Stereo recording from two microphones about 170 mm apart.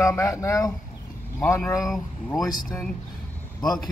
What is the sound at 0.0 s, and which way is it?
Speech, 15° left (ahead or behind).